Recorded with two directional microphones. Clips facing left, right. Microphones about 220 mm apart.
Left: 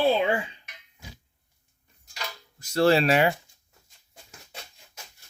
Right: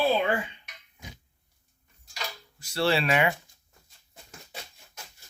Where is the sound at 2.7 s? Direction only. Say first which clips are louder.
Left 5 dB; 40° left (ahead or behind).